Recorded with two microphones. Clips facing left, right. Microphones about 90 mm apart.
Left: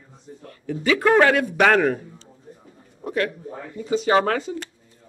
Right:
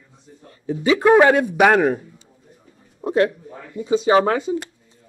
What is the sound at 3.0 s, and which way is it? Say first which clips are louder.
A man's voice: right 6 dB; 25° right (ahead or behind).